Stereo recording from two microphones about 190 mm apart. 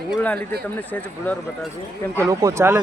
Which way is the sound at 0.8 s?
10° left (ahead or behind).